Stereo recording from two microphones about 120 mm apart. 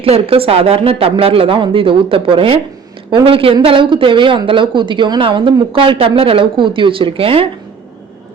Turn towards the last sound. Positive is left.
turn(degrees=-50)  # may be behind; listen again after turning